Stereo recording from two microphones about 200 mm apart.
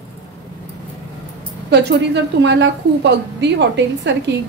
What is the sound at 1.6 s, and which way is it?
A woman's voice, 55° right (ahead or behind).